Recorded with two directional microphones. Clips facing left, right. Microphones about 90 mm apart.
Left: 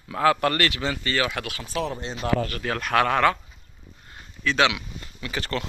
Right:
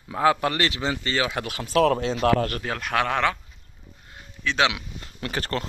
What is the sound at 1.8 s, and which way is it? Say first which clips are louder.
Speech: right 9 dB; 90° right.